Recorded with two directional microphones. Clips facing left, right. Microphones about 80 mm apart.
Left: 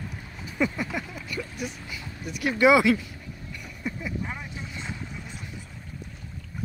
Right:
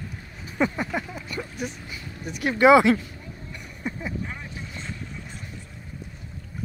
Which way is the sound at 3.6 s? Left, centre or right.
Right.